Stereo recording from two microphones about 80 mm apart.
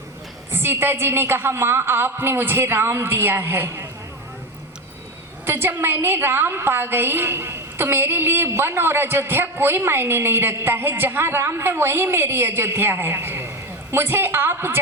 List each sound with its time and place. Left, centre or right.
0.5 s a woman's voice: right
5.5 s a woman's voice: right